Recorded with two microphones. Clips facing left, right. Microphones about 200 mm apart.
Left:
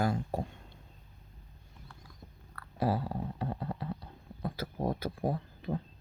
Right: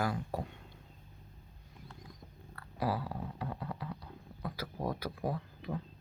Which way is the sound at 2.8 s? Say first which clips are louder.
Left 4 dB; 25° left (ahead or behind).